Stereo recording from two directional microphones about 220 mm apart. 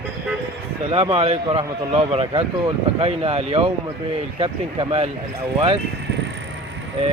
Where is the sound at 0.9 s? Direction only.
25° right (ahead or behind).